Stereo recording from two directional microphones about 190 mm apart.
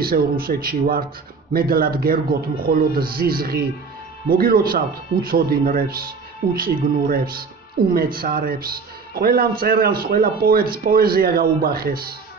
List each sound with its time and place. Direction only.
0.0 s speech: 50° right (ahead or behind)